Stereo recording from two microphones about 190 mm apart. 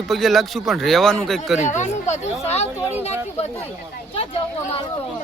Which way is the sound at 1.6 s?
40° left (ahead or behind).